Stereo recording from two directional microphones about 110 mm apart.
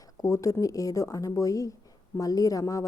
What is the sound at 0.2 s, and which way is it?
A woman's voice, 30° left (ahead or behind).